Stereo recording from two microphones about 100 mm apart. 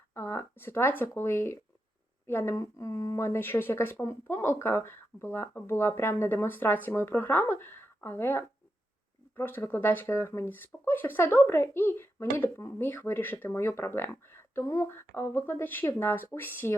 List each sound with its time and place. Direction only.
0.1 s speech: 25° left (ahead or behind)
3.2 s speech: 25° left (ahead or behind)